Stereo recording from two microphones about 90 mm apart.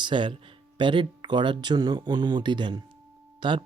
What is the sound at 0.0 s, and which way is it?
Speech, 65° right (ahead or behind).